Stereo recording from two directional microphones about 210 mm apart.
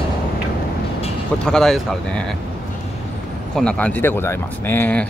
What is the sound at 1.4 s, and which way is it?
Speech, centre (ahead or behind).